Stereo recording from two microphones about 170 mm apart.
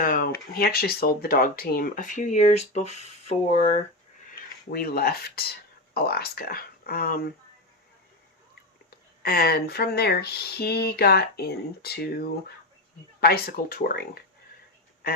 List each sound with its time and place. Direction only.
0.0 s a sound: 55° left (ahead or behind)
0.6 s speech: 65° left (ahead or behind); by 3.3 s 40° left (ahead or behind)
4.3 s speech: 60° left (ahead or behind)
8.9 s speech: 65° left (ahead or behind)